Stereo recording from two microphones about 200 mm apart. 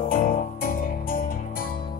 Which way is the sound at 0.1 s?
45° left (ahead or behind).